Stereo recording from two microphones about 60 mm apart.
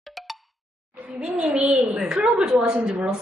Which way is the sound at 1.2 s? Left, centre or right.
Centre.